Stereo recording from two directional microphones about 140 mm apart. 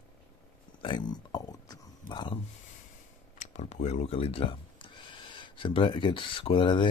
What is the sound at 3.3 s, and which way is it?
Speech, 55° left (ahead or behind).